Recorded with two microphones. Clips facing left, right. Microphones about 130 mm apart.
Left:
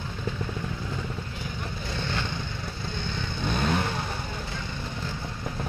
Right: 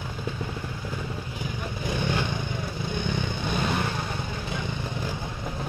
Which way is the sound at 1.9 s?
15° right (ahead or behind).